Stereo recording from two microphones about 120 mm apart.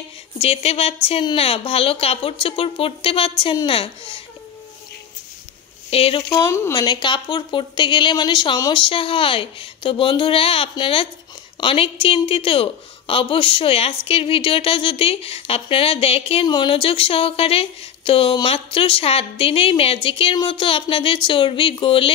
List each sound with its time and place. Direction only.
0.4 s a woman's voice: 60° left (ahead or behind)
5.9 s speech: 55° left (ahead or behind)
6.4 s speech: 25° left (ahead or behind)
6.8 s a woman's voice: 40° left (ahead or behind)
8.8 s a woman's voice: 50° left (ahead or behind)
16.4 s a woman's voice: 40° left (ahead or behind)